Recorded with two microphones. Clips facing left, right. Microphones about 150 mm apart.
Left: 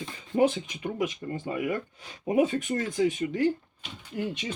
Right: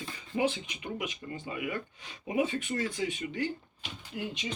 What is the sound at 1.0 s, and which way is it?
Speech, 40° left (ahead or behind).